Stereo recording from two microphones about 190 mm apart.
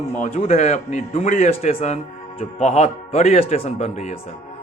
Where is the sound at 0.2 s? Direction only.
40° left (ahead or behind).